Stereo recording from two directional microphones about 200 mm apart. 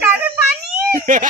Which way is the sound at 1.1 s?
45° right (ahead or behind).